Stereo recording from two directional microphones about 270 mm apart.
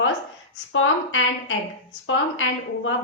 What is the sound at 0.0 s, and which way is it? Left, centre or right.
A woman's voice, left.